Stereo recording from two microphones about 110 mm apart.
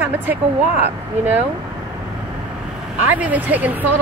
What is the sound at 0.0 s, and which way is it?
Speech, 20° right (ahead or behind).